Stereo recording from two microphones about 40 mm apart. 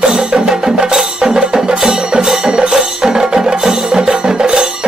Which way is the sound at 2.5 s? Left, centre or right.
Right.